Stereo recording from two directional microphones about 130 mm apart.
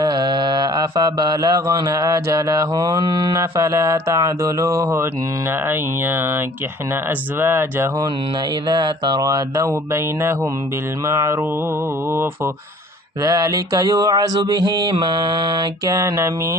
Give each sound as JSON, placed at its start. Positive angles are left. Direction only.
{"t": 0.0, "sound": "mantra", "side_deg": -35}
{"t": 7.3, "sound": "mantra", "side_deg": -20}
{"t": 8.7, "sound": "mantra", "side_deg": -35}
{"t": 13.2, "sound": "mantra", "side_deg": -25}